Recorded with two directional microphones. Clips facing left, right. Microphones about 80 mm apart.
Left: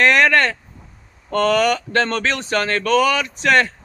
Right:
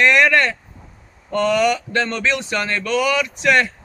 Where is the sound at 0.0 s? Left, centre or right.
Left.